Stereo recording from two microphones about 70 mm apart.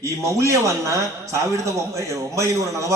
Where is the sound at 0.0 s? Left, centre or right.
Right.